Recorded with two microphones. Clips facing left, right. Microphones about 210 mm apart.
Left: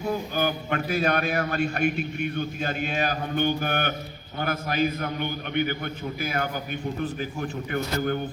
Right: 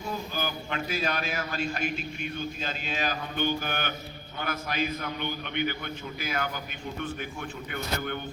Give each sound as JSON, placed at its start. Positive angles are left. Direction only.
{"t": 0.3, "sound": "a man's voice", "side_deg": 55}
{"t": 7.7, "sound": "a man's voice", "side_deg": 40}